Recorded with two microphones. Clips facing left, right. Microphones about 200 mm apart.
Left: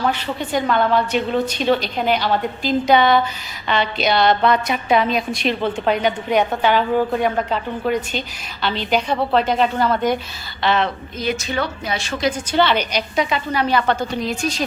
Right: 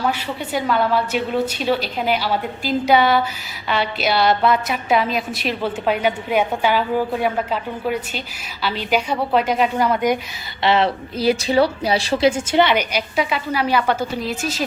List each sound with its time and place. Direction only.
0.1 s a woman's voice: 5° right (ahead or behind)
10.6 s a woman's voice: 25° right (ahead or behind)
12.6 s a woman's voice: 10° right (ahead or behind)